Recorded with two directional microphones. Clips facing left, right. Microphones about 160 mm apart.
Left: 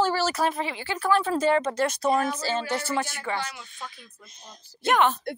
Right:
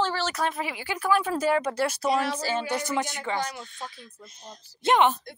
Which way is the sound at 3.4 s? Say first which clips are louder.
Right 3 dB; 40° right (ahead or behind).